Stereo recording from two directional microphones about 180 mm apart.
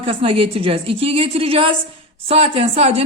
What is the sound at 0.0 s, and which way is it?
A woman's voice, 30° right (ahead or behind).